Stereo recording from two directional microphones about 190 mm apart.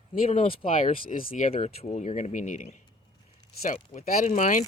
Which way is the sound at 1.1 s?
50° left (ahead or behind).